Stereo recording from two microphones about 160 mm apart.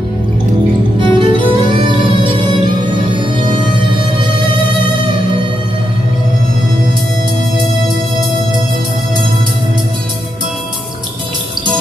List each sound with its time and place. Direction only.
0.9 s music: 30° right (ahead or behind)